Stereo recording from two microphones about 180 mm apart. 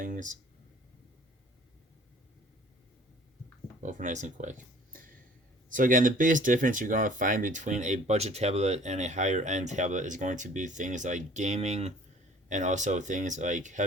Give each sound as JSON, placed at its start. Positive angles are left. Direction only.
{"t": 0.0, "sound": "speech", "side_deg": -45}
{"t": 3.8, "sound": "speech", "side_deg": -45}